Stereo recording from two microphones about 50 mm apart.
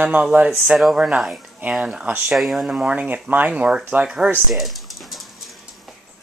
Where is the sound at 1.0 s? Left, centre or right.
Centre.